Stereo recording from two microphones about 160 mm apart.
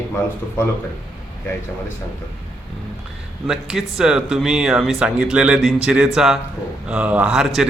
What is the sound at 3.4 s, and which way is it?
Speech, 5° right (ahead or behind).